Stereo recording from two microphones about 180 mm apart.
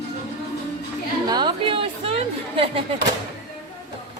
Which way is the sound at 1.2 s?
25° right (ahead or behind).